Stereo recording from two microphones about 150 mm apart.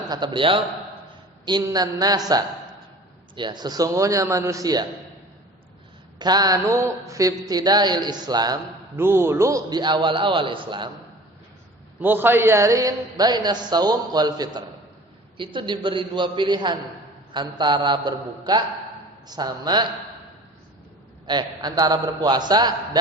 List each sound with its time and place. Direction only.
0.1 s a man's voice: 30° right (ahead or behind)
6.1 s a man's voice: 25° right (ahead or behind)
9.0 s a man's voice: 15° right (ahead or behind)
11.9 s a man's voice: 15° right (ahead or behind); by 19.9 s 30° right (ahead or behind)
21.2 s a man's voice: 25° right (ahead or behind)